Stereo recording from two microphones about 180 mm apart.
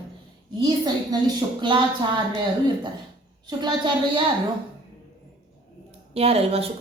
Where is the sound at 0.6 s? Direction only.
20° right (ahead or behind).